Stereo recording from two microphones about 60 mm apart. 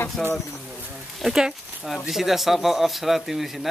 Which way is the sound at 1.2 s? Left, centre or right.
Centre.